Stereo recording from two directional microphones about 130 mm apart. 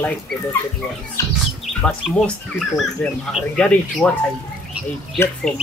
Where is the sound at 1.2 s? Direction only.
25° left (ahead or behind).